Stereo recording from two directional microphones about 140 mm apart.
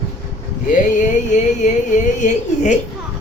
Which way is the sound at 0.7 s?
65° left (ahead or behind).